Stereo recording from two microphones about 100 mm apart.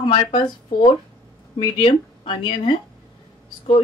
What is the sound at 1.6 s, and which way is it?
Speech, 60° left (ahead or behind).